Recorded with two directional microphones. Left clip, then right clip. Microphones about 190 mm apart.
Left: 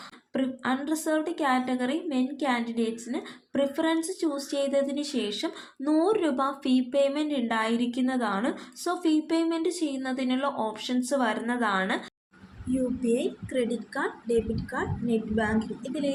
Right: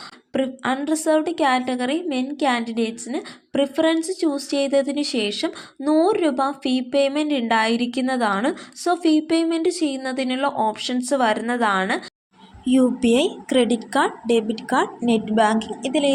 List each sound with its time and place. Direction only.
0.3 s a woman's voice: 30° right (ahead or behind)
13.0 s a woman's voice: 50° right (ahead or behind)